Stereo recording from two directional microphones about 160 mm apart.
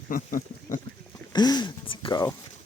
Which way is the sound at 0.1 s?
60° left (ahead or behind).